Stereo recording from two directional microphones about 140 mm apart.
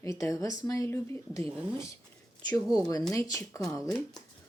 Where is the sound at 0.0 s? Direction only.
25° left (ahead or behind).